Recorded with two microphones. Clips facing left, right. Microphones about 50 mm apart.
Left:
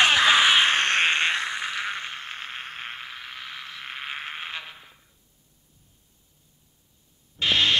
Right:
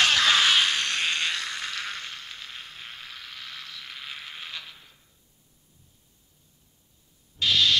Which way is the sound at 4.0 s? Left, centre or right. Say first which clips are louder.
Left 7 dB; left.